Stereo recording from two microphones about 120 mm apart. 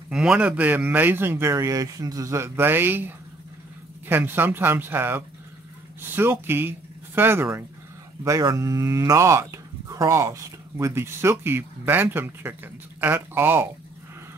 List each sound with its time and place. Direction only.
0.1 s a man's voice: 5° right (ahead or behind)